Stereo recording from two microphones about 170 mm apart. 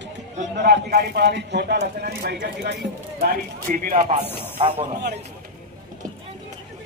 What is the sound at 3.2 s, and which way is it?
Speech, 60° right (ahead or behind).